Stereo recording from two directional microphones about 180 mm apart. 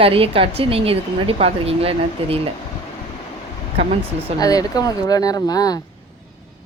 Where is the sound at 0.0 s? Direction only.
30° right (ahead or behind).